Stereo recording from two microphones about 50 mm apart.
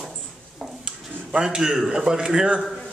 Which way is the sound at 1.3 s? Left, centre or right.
Centre.